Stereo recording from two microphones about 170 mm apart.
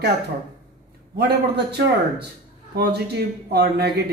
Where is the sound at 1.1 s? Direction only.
80° right.